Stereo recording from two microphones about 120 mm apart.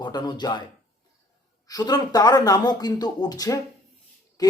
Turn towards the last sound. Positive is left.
turn(degrees=30)  # may be behind; listen again after turning